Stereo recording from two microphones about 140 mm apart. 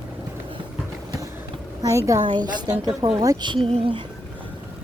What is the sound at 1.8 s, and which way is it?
A woman's voice, 20° right (ahead or behind).